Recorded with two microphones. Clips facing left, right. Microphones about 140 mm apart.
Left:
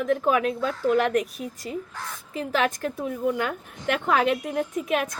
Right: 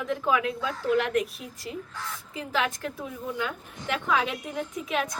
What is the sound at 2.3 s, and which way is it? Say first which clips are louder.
A woman's voice: left 4 dB; 55° left (ahead or behind).